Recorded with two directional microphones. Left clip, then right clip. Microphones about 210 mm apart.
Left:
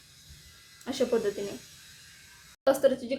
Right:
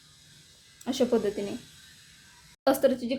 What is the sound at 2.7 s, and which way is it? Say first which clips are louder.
Speech: even; 30° right (ahead or behind).